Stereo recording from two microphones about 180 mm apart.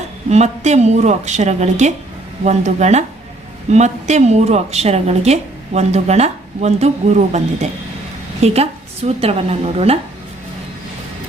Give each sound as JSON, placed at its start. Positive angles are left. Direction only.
{"t": 0.3, "sound": "a woman's voice", "side_deg": -40}